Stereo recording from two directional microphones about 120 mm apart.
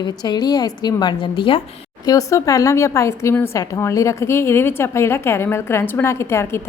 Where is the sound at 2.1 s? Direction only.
25° left (ahead or behind).